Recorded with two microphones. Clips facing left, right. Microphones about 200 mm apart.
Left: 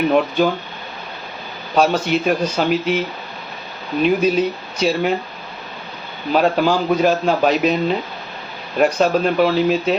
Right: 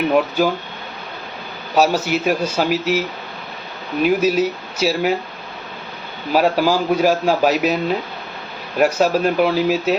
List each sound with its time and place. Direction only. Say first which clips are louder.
0.1 s a man's voice: left 1 dB; 5° right (ahead or behind)
1.7 s a man's voice: even; 5° right (ahead or behind)
4.0 s speech: even; 5° right (ahead or behind)
6.3 s a man's voice: even; 5° right (ahead or behind)